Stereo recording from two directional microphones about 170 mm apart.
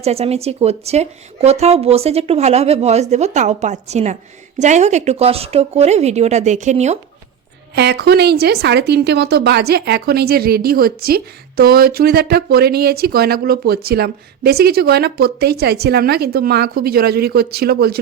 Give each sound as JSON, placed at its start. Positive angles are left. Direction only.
{"t": 0.0, "sound": "a woman's voice", "side_deg": -40}
{"t": 7.8, "sound": "speech", "side_deg": -75}